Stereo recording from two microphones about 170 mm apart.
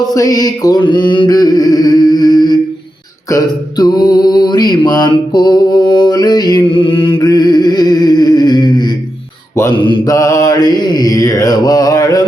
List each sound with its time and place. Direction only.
0.1 s mantra: 20° left (ahead or behind)
3.2 s a sound: 20° left (ahead or behind)
9.7 s mantra: 30° left (ahead or behind)